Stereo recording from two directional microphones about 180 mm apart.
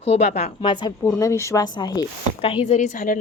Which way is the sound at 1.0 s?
15° left (ahead or behind).